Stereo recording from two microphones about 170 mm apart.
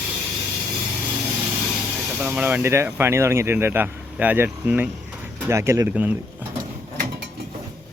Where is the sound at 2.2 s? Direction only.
10° right (ahead or behind).